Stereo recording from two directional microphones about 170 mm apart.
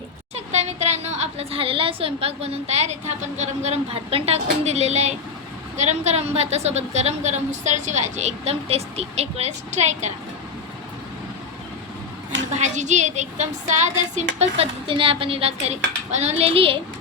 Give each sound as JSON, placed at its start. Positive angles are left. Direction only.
{"t": 0.3, "sound": "a woman's voice", "side_deg": -40}
{"t": 12.5, "sound": "a woman's voice", "side_deg": -45}
{"t": 14.3, "sound": "a woman's voice", "side_deg": -35}